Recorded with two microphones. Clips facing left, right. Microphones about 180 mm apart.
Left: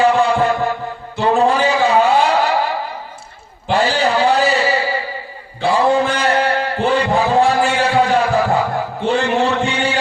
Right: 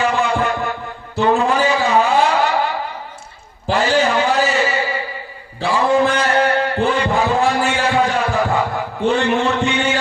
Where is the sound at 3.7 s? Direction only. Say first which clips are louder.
Even; 35° left (ahead or behind).